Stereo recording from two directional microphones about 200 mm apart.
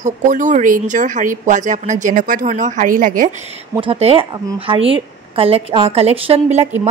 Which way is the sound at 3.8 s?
30° right (ahead or behind).